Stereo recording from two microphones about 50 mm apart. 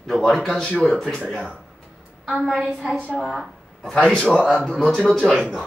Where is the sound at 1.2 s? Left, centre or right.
Centre.